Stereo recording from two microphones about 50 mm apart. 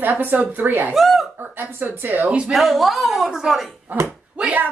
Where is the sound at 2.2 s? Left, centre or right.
Right.